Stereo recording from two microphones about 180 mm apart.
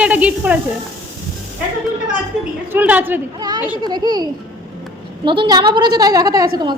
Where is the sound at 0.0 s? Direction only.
5° right (ahead or behind).